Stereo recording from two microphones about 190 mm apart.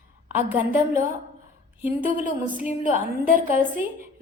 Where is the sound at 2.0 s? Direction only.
45° right (ahead or behind).